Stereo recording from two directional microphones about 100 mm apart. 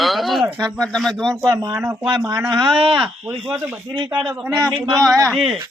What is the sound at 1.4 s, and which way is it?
A man's voice, 40° right (ahead or behind).